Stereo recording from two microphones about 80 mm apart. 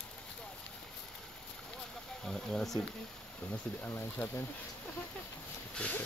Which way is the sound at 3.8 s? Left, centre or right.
Left.